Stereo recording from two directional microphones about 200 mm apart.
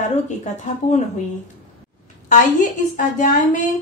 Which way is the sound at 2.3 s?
40° left (ahead or behind).